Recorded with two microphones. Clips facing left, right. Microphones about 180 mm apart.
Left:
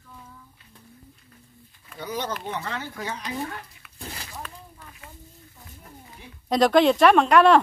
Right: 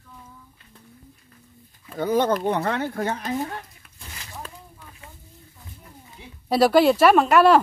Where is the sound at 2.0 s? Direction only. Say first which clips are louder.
Right 10 dB; 50° right (ahead or behind).